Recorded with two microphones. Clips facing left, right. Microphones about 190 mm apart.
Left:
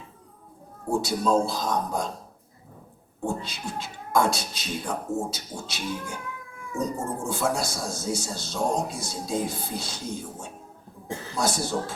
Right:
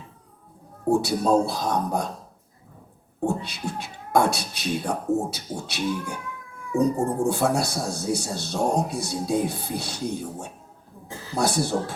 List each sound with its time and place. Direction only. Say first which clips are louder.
0.9 s speech: right 3 dB; 60° right (ahead or behind)
3.2 s speech: right 4 dB; 60° right (ahead or behind)